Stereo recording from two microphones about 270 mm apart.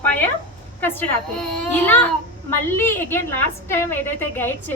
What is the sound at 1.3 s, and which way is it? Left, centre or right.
A child's voice, centre.